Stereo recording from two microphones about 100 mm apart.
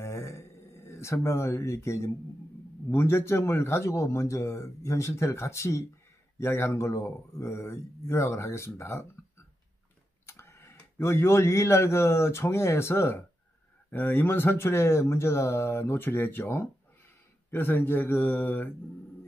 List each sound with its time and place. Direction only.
0.0 s a sound: 30° left (ahead or behind)
2.9 s a man's voice: 25° left (ahead or behind)
10.2 s a man's voice: 25° left (ahead or behind)